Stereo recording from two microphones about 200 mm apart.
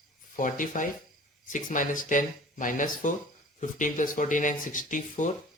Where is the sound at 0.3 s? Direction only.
40° left (ahead or behind).